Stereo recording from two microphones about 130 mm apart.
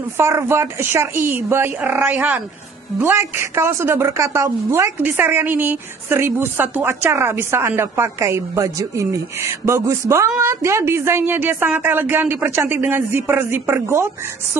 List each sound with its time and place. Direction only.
0.2 s a woman's voice: 20° right (ahead or behind)